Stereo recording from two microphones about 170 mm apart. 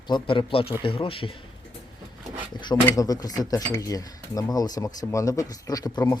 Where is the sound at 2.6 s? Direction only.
25° left (ahead or behind).